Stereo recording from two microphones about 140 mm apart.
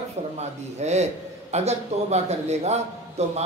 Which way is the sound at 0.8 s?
50° right (ahead or behind).